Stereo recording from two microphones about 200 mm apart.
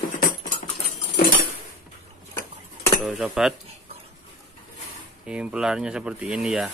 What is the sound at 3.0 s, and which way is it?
Dishes, centre (ahead or behind).